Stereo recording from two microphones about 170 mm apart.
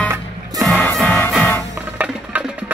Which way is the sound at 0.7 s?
5° left (ahead or behind).